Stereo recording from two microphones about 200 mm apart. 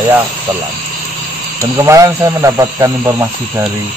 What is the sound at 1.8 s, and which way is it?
A man's voice, 15° right (ahead or behind).